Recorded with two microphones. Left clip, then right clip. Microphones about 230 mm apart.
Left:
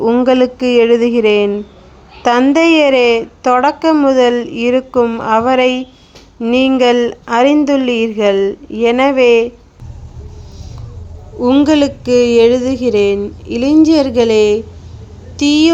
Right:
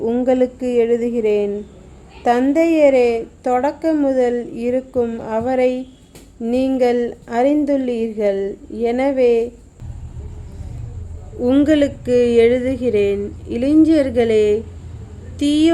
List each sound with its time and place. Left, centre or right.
0.1 s a woman's voice: centre
11.4 s a woman's voice: centre